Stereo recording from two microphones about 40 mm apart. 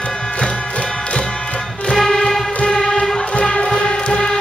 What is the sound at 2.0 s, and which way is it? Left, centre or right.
Music, centre.